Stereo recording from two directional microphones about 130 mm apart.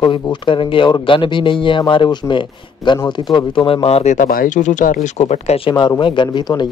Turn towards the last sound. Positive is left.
turn(degrees=35)  # may be behind; listen again after turning